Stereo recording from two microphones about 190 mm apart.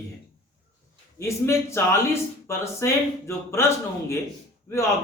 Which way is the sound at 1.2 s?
15° left (ahead or behind).